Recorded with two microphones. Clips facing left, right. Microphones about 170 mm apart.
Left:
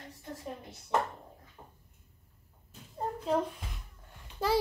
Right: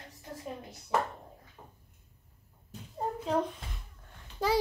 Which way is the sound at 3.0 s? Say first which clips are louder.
Even; centre (ahead or behind).